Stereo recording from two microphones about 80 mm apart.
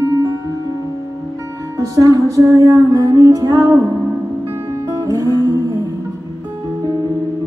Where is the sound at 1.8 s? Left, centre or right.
Right.